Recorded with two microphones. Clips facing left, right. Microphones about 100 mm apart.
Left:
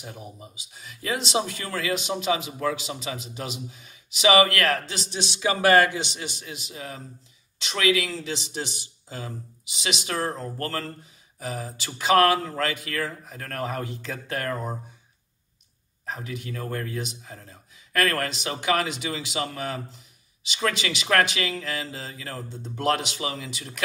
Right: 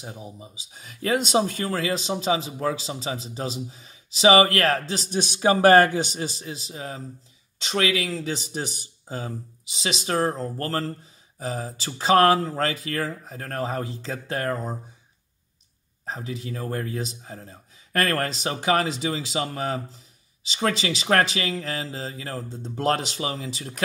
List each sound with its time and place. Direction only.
0.0 s speech: 25° right (ahead or behind)
0.7 s speech: 45° right (ahead or behind); by 14.7 s 30° right (ahead or behind)
16.1 s speech: 30° right (ahead or behind)